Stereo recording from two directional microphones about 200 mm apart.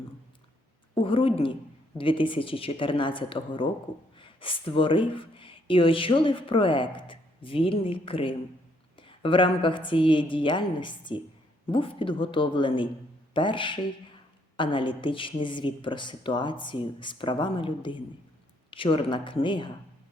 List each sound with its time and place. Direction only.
0.9 s speech: 25° left (ahead or behind)